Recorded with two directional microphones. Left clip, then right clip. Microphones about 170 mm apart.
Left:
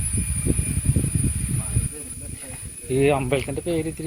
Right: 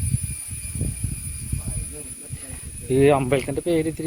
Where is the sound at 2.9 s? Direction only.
45° right (ahead or behind); by 4.1 s 65° right (ahead or behind).